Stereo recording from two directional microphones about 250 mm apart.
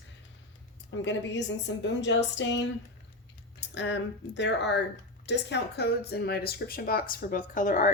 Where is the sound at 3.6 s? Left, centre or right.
Left.